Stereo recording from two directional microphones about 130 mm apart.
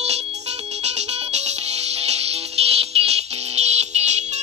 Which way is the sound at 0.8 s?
60° right (ahead or behind).